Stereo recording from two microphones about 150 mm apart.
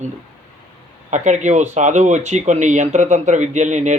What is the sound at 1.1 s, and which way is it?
Speech, 55° right (ahead or behind).